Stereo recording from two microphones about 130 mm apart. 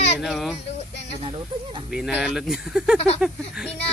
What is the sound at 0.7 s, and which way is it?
Speech, 55° left (ahead or behind).